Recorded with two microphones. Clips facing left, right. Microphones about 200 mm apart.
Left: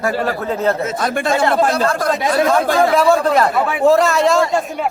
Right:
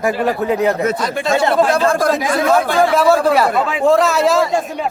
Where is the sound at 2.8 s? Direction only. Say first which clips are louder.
Left 1 dB; centre (ahead or behind).